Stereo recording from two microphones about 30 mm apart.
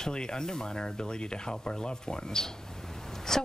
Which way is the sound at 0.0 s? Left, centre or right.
Left.